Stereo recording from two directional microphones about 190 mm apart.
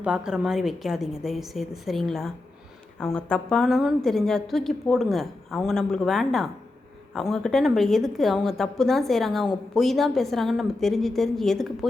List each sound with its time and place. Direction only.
0.0 s a woman's voice: 5° right (ahead or behind)